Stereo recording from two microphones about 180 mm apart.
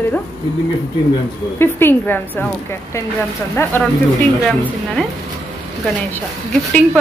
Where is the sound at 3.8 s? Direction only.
10° left (ahead or behind).